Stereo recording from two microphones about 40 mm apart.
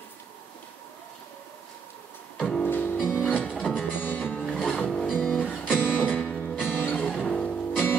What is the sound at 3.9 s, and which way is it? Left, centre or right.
Music, left.